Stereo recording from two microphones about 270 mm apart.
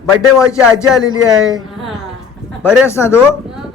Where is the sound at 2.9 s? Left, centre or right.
Centre.